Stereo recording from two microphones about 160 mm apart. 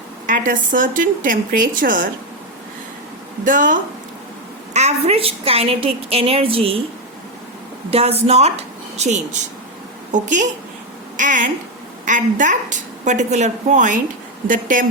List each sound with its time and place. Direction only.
0.3 s a woman's voice: 55° right (ahead or behind)
3.4 s a woman's voice: 55° right (ahead or behind)
4.7 s a woman's voice: 45° right (ahead or behind)
7.9 s a woman's voice: 40° right (ahead or behind); by 14.8 s 55° right (ahead or behind)